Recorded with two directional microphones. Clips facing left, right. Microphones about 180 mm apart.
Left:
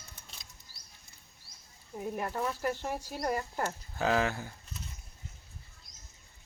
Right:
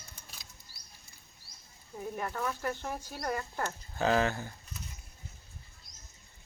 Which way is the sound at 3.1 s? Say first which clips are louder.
Left 3 dB; 25° left (ahead or behind).